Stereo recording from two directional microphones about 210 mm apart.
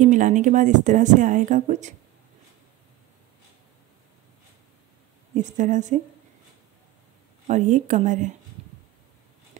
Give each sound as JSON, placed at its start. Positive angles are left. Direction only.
{"t": 0.0, "sound": "speech", "side_deg": -35}
{"t": 5.3, "sound": "speech", "side_deg": -35}
{"t": 7.4, "sound": "speech", "side_deg": -35}